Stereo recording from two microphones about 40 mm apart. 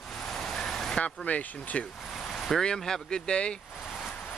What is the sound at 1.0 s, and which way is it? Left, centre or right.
Speech, left.